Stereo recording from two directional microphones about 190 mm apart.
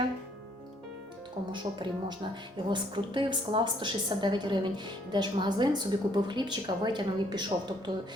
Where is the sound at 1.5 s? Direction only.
25° right (ahead or behind).